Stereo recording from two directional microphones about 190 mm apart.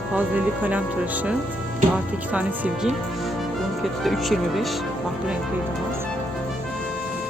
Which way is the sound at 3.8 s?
Centre (ahead or behind).